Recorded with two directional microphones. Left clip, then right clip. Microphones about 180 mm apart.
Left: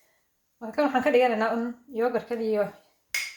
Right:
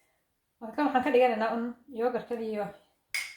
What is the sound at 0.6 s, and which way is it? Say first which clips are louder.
A woman's voice: left 3 dB; 35° left (ahead or behind).